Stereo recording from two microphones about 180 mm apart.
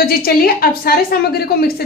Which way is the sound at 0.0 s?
55° left (ahead or behind).